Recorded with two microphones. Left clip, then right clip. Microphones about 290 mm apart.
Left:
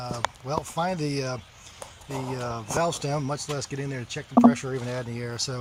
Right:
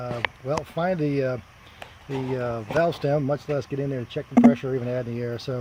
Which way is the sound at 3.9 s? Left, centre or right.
Right.